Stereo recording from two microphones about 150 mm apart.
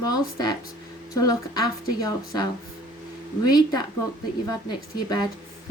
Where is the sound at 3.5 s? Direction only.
25° left (ahead or behind).